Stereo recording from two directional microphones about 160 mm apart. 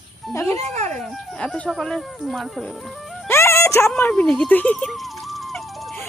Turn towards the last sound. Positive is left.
turn(degrees=0)  # may be behind; listen again after turning